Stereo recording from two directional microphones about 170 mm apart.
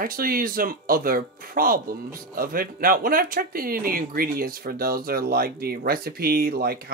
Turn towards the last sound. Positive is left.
turn(degrees=-65)  # may be behind; listen again after turning